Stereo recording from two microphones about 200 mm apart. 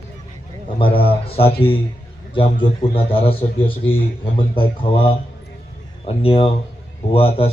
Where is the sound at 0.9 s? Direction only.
30° left (ahead or behind).